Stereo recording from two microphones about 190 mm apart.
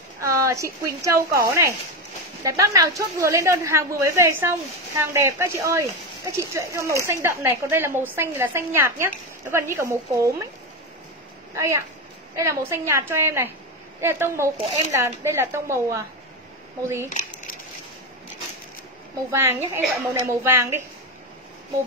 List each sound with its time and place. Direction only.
0.2 s a woman's voice: 15° right (ahead or behind)
11.5 s a woman's voice: 15° right (ahead or behind)
19.3 s a woman's voice: 15° right (ahead or behind)